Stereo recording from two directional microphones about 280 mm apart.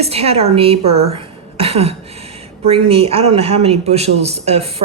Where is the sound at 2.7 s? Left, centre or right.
Right.